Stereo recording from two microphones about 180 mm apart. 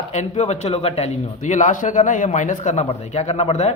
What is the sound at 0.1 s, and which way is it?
A man's voice, 40° left (ahead or behind).